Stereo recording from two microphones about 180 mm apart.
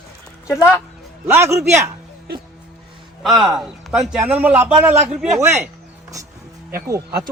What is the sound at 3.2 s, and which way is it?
A man's voice, centre (ahead or behind).